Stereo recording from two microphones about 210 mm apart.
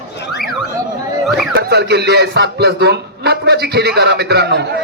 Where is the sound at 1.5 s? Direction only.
55° right (ahead or behind).